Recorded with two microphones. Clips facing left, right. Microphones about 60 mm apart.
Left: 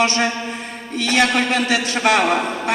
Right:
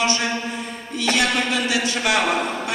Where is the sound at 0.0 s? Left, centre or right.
Left.